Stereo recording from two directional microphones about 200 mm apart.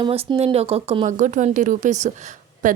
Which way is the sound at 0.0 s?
25° right (ahead or behind).